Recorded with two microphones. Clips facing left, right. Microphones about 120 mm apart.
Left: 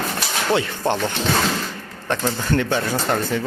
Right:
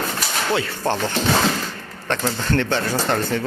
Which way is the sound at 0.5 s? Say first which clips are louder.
Left 2 dB; 15° left (ahead or behind).